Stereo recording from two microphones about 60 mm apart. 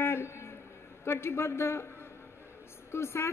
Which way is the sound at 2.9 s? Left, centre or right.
Left.